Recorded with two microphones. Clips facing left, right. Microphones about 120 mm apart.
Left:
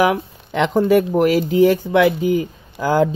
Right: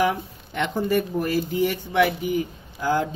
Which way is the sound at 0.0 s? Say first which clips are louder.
Left 6 dB; 90° left.